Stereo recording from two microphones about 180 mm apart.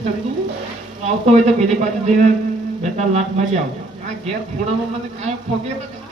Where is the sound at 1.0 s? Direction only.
35° right (ahead or behind).